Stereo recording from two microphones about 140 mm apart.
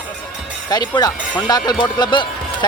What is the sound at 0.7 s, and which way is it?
Speech, 30° left (ahead or behind).